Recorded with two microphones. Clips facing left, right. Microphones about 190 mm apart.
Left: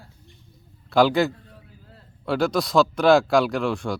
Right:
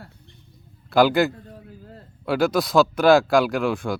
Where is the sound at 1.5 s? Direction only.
45° right (ahead or behind).